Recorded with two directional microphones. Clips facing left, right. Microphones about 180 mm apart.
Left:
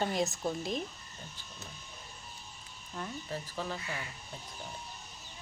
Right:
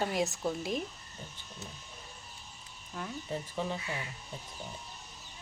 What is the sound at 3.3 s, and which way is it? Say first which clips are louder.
Speech: right 3 dB; 20° right (ahead or behind).